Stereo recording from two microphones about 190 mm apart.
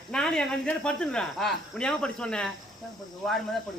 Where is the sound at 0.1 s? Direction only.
5° left (ahead or behind).